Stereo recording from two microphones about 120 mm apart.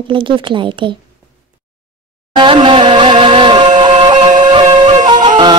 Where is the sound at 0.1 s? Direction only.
45° right (ahead or behind).